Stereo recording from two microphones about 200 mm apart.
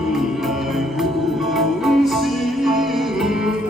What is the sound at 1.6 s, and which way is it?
Music, centre (ahead or behind).